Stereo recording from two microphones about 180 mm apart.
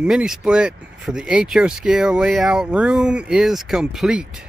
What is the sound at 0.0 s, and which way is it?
Speech, 5° right (ahead or behind).